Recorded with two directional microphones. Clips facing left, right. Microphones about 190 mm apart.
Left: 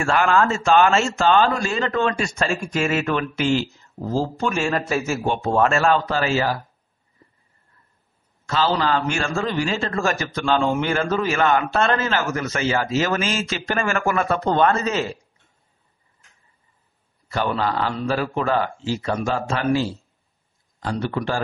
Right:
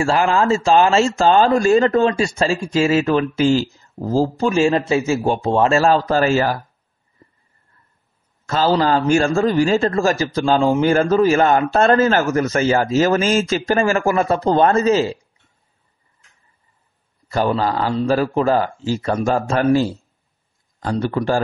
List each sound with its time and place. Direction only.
0.0 s a man's voice: 30° right (ahead or behind); by 6.6 s 45° right (ahead or behind)
8.5 s a man's voice: 40° right (ahead or behind)
17.3 s a man's voice: 40° right (ahead or behind)